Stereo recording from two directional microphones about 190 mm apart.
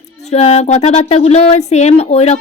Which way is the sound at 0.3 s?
35° left (ahead or behind).